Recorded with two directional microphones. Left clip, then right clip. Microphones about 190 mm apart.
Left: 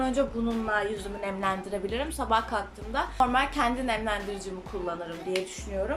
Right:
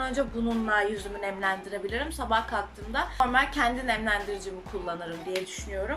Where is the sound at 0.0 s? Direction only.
5° left (ahead or behind).